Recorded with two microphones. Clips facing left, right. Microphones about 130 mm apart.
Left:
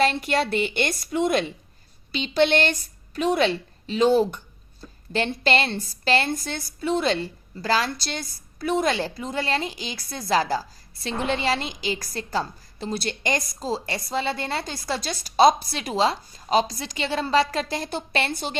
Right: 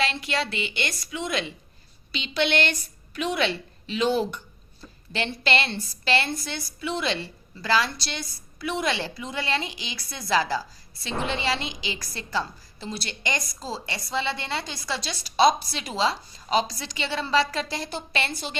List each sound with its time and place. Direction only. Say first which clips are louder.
0.0 s a woman's voice: left 5 dB; 50° left (ahead or behind)